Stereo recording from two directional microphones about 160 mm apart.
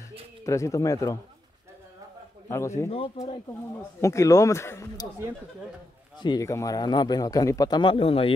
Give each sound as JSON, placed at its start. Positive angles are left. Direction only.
{"t": 0.4, "sound": "speech", "side_deg": 20}
{"t": 2.4, "sound": "a man's voice", "side_deg": 15}
{"t": 4.0, "sound": "speech", "side_deg": 20}
{"t": 6.1, "sound": "speech", "side_deg": 25}